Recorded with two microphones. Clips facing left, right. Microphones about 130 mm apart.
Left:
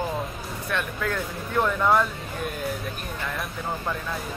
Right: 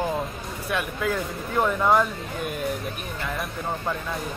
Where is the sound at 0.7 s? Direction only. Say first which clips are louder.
Right 2 dB; 5° right (ahead or behind).